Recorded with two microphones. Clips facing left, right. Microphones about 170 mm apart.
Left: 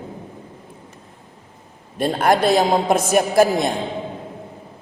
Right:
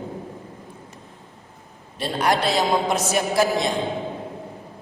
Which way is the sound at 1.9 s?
50° left (ahead or behind).